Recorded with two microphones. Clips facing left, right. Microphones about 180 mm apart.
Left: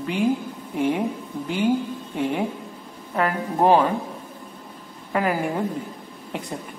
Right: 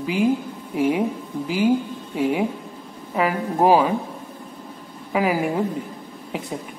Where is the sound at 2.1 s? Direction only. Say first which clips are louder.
Right 3 dB; 5° right (ahead or behind).